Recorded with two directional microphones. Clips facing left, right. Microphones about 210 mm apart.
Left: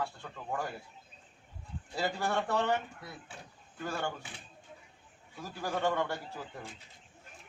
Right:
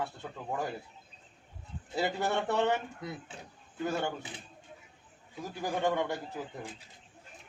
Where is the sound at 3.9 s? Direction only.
20° right (ahead or behind).